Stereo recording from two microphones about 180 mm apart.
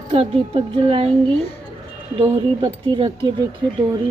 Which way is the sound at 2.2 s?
20° right (ahead or behind).